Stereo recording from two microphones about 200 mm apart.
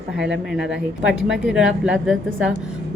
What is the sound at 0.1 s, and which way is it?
Speech, 5° right (ahead or behind).